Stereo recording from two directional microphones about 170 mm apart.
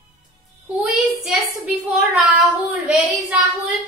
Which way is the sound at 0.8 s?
5° right (ahead or behind).